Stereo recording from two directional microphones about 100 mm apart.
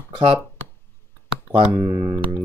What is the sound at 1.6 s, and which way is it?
Speech, 20° right (ahead or behind).